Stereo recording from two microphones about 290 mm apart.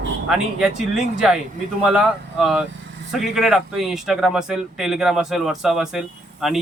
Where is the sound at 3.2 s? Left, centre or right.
Centre.